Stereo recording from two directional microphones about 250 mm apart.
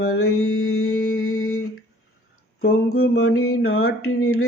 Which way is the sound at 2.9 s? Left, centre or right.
Left.